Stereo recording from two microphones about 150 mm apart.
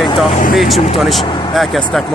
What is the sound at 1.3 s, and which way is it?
Speech, 30° left (ahead or behind).